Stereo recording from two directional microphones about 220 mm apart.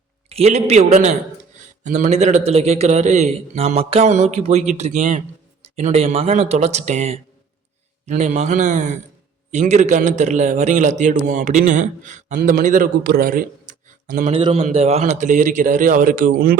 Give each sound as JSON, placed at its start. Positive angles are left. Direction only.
{"t": 0.3, "sound": "a man's voice", "side_deg": -30}